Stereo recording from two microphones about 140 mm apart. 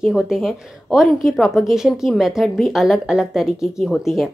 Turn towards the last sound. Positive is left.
turn(degrees=0)  # may be behind; listen again after turning